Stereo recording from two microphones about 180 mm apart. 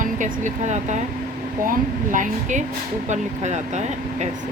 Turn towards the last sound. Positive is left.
turn(degrees=-40)  # may be behind; listen again after turning